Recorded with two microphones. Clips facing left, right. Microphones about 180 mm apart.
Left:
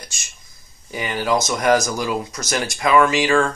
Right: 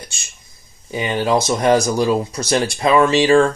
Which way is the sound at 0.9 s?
25° right (ahead or behind).